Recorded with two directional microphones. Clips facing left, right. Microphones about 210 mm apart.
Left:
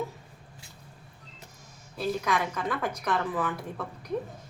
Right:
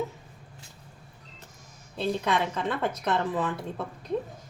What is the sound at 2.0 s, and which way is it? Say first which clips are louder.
Speech: right 2 dB; 25° right (ahead or behind).